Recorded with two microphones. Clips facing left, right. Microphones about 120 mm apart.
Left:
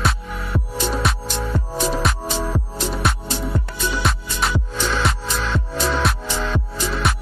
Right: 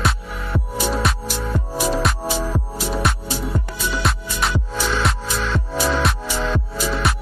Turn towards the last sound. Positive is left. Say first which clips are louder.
# right 1 dB
turn(degrees=0)  # may be behind; listen again after turning